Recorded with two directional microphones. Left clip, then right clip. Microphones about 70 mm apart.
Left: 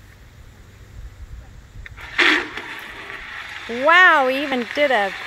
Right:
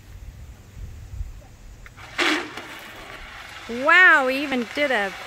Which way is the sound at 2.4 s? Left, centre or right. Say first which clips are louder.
Left 5 dB; right.